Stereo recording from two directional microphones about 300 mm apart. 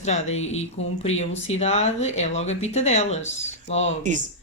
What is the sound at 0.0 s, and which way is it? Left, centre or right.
Speech, left.